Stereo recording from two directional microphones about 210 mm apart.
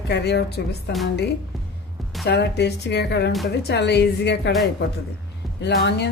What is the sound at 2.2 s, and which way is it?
Speech, 50° left (ahead or behind).